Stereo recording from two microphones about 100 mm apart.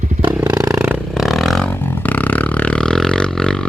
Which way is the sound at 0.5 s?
35° right (ahead or behind).